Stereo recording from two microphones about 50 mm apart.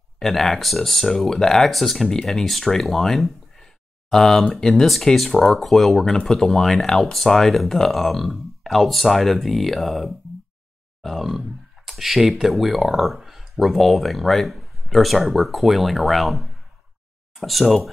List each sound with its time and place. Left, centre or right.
0.2 s speech: centre